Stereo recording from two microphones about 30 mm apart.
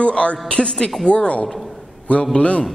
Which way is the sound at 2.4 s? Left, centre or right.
Left.